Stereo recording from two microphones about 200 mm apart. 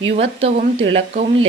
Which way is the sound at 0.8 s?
65° right (ahead or behind).